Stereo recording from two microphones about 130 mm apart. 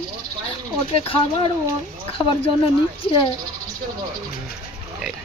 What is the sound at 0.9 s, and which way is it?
Speech, 45° left (ahead or behind).